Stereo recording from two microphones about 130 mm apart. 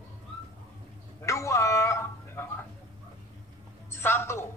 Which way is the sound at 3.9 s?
20° left (ahead or behind).